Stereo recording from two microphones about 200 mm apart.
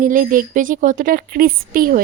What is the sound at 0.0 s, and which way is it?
A woman's voice, 40° right (ahead or behind).